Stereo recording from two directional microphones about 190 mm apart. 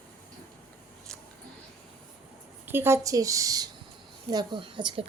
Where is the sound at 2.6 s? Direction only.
10° right (ahead or behind).